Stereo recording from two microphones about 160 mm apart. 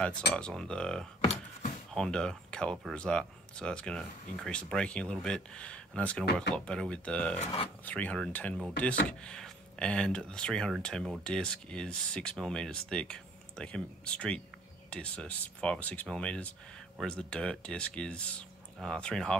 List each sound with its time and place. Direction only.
0.3 s speech: 5° left (ahead or behind)
1.2 s a sound: 45° left (ahead or behind)
2.0 s speech: 5° left (ahead or behind)